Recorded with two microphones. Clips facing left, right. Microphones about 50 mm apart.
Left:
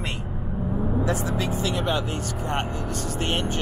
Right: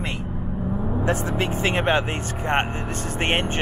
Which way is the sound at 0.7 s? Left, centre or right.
Centre.